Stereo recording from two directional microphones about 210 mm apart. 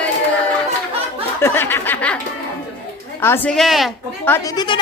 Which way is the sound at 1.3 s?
10° left (ahead or behind).